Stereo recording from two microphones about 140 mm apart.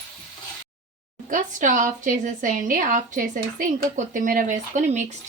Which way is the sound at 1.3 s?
70° right (ahead or behind).